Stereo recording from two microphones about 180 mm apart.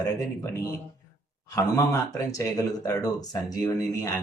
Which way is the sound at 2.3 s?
20° left (ahead or behind).